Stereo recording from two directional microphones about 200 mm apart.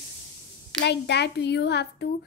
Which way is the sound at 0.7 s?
55° left (ahead or behind).